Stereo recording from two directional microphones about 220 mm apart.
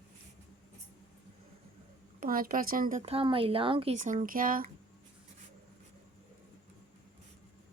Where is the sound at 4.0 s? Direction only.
35° right (ahead or behind).